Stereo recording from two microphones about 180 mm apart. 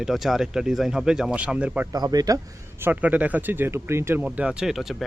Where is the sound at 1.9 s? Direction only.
20° right (ahead or behind).